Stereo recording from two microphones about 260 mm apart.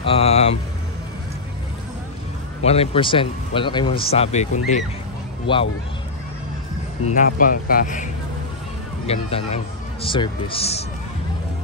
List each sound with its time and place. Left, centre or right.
0.0 s vehicle: left
2.6 s speech: left
7.1 s speech: left